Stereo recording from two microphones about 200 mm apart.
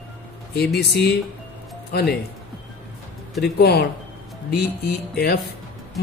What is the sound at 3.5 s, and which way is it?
Speech, 55° left (ahead or behind).